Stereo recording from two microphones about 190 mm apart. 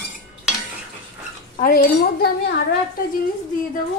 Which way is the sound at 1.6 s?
45° left (ahead or behind).